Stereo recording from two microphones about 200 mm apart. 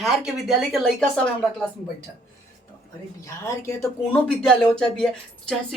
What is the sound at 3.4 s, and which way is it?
Speech, 15° left (ahead or behind).